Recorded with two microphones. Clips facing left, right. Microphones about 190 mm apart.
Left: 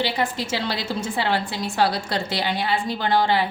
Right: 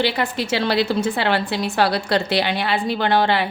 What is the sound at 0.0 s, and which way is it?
A woman's voice, 65° right (ahead or behind).